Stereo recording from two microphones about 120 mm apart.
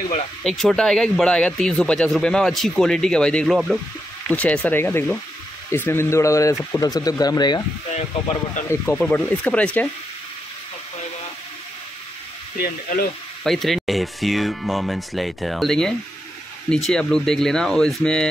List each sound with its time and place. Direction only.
0.4 s speech: centre (ahead or behind)
4.3 s speech: 10° left (ahead or behind); by 7.6 s 35° left (ahead or behind)
8.6 s speech: 20° left (ahead or behind)
13.4 s speech: centre (ahead or behind)